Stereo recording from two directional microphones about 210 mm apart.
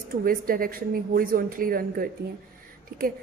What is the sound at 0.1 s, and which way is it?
A woman's voice, 45° right (ahead or behind).